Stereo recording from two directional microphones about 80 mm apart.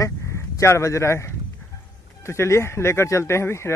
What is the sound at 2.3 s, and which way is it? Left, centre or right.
Speech, left.